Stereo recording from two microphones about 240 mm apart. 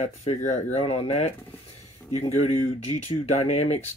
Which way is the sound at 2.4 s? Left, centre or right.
Left.